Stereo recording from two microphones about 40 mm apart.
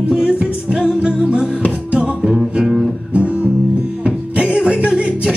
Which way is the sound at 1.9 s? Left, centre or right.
Right.